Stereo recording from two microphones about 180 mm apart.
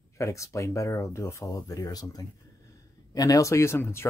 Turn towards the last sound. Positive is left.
turn(degrees=15)  # may be behind; listen again after turning